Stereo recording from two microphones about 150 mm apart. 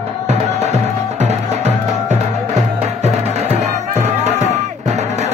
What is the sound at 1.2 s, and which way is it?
Music, 45° right (ahead or behind).